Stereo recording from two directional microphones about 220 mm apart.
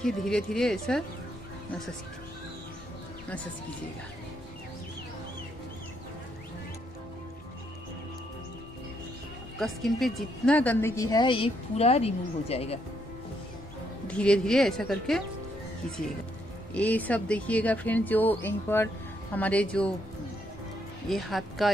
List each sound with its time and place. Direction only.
0.0 s a woman's voice: centre (ahead or behind)
9.6 s a woman's voice: centre (ahead or behind); by 12.8 s 25° left (ahead or behind)
14.0 s a woman's voice: 5° left (ahead or behind)
16.7 s a woman's voice: 5° left (ahead or behind)
21.1 s a woman's voice: centre (ahead or behind)